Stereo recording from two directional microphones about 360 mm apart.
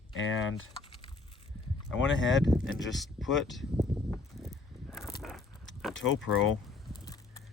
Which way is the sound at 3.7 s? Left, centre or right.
Centre.